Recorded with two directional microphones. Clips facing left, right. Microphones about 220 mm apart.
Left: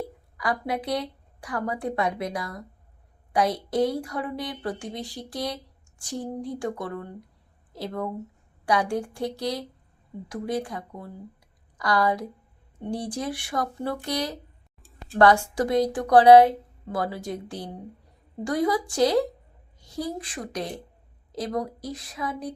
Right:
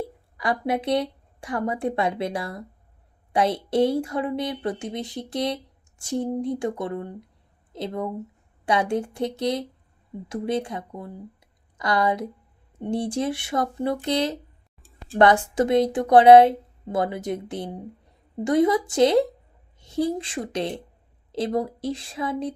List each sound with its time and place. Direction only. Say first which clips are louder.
0.3 s speech: right 3 dB; 25° right (ahead or behind)